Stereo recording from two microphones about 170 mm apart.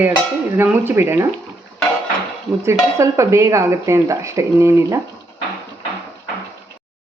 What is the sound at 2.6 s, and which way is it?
Speech, 15° right (ahead or behind).